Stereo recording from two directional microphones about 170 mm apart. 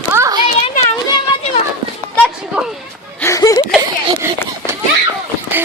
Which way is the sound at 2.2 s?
5° right (ahead or behind).